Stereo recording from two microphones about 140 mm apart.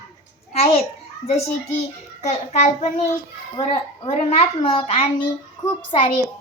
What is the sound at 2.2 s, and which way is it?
Speech, 55° left (ahead or behind).